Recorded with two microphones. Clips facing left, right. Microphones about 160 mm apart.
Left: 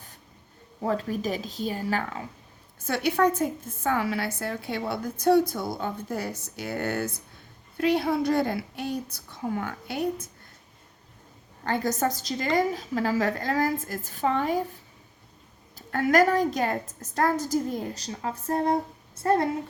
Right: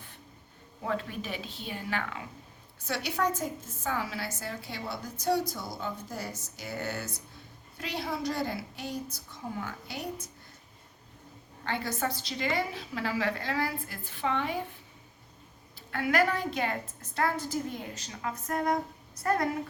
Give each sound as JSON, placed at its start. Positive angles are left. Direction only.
{"t": 0.8, "sound": "a woman's voice", "side_deg": 40}
{"t": 2.8, "sound": "a woman's voice", "side_deg": 55}
{"t": 11.6, "sound": "a woman's voice", "side_deg": 45}
{"t": 15.7, "sound": "a woman's voice", "side_deg": 45}